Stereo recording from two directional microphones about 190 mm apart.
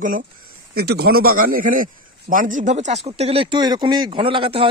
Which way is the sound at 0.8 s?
55° right (ahead or behind).